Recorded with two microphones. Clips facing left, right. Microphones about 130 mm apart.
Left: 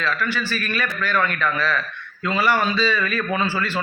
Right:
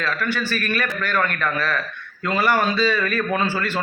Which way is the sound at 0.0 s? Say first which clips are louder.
Even; 50° right (ahead or behind).